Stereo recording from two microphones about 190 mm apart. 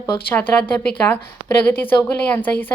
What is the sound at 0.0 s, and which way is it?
A woman's voice, 10° left (ahead or behind).